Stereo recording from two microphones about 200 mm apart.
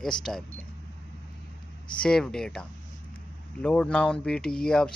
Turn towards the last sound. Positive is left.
turn(degrees=5)  # may be behind; listen again after turning